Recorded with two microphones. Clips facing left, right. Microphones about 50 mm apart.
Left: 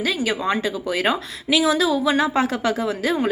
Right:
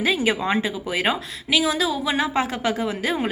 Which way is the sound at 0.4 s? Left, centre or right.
Centre.